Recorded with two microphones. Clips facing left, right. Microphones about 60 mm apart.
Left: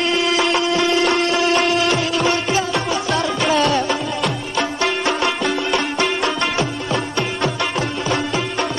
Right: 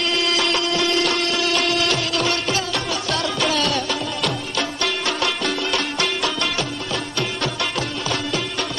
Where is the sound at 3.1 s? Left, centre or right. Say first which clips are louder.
Left 4 dB; left.